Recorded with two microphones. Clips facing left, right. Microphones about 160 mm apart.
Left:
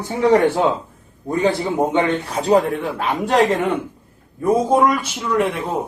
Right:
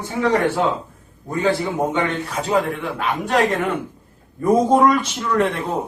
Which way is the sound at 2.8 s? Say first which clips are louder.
Left 2 dB; 35° left (ahead or behind).